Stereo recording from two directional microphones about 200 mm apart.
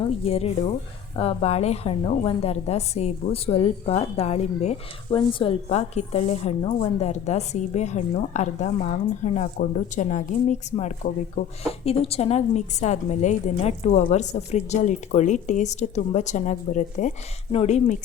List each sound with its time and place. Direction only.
0.3 s a woman's voice: 30° left (ahead or behind)